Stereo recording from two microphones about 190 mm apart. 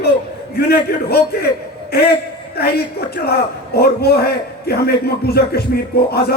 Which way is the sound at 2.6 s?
55° left (ahead or behind).